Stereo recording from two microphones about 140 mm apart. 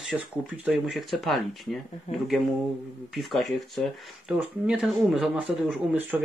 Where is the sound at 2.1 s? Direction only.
55° left (ahead or behind).